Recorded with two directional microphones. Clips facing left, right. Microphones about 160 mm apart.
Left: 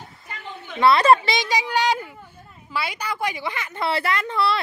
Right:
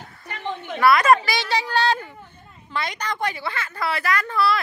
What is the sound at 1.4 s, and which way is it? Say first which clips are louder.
Speech: even; 15° left (ahead or behind).